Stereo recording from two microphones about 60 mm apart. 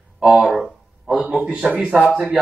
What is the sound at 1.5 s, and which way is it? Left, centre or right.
Speech, centre.